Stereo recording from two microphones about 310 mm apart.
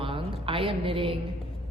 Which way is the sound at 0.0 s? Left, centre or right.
Centre.